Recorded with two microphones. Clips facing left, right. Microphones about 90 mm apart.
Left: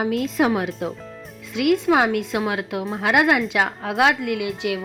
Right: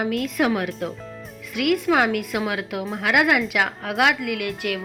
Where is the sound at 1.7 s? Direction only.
20° left (ahead or behind).